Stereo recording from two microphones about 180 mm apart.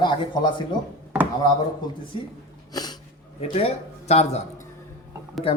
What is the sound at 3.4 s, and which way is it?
Speech, 35° left (ahead or behind).